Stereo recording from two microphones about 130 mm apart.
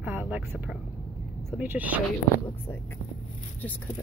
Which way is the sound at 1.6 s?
10° right (ahead or behind).